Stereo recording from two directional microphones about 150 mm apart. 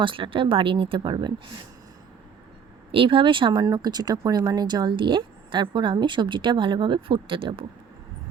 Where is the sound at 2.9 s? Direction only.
35° right (ahead or behind).